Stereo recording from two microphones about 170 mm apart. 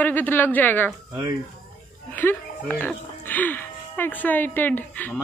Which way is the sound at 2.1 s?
10° left (ahead or behind).